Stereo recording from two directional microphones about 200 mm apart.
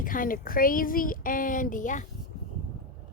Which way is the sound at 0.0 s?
45° left (ahead or behind).